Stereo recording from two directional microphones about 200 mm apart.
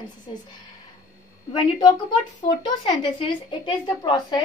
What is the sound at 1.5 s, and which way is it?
A woman's voice, 25° left (ahead or behind).